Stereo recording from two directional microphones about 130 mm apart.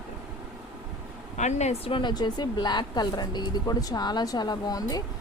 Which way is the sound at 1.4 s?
65° left (ahead or behind).